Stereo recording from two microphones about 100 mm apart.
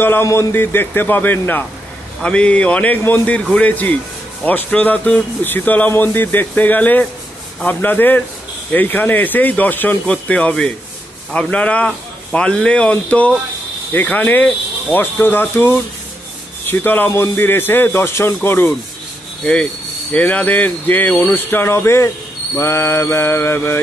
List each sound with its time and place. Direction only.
0.0 s a man's voice: 25° left (ahead or behind)
19.4 s a man's voice: 10° left (ahead or behind)